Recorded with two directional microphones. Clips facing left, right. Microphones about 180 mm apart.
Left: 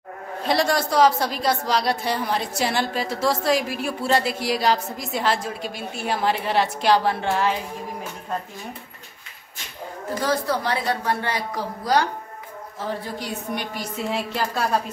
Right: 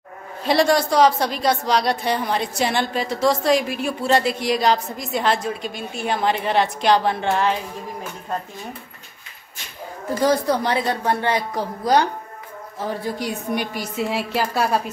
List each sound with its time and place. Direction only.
0.5 s a woman's voice: centre (ahead or behind)
10.2 s a woman's voice: 20° right (ahead or behind)